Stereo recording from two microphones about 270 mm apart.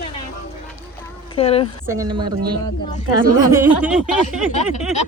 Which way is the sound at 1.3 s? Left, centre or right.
Left.